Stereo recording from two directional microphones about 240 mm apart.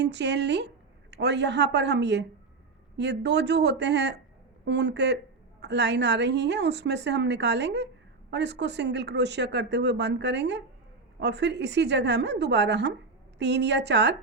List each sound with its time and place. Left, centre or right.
0.0 s speech: right